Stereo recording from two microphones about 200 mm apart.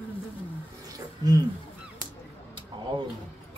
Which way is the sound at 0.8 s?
20° right (ahead or behind).